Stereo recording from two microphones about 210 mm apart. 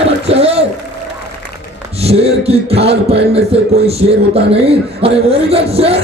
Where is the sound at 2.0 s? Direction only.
30° right (ahead or behind).